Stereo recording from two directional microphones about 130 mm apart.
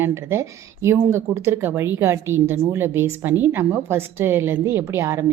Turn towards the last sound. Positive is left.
turn(degrees=-20)  # may be behind; listen again after turning